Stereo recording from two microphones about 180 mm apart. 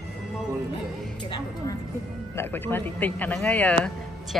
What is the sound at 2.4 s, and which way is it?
A man's voice, 10° left (ahead or behind).